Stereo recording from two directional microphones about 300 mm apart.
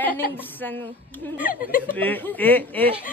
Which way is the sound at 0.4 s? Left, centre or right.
Centre.